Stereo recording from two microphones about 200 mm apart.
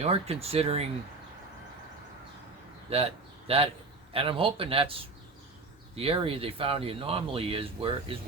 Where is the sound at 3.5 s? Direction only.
30° right (ahead or behind).